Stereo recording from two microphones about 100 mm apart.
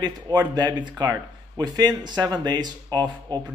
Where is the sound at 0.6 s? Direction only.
50° right (ahead or behind).